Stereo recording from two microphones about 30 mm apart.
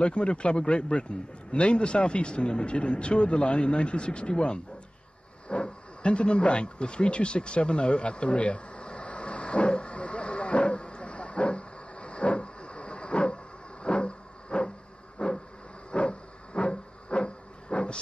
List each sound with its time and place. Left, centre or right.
0.0 s a man's voice: left
5.5 s a sound: left
13.8 s music: left
15.1 s vehicle: left
15.9 s hiss: left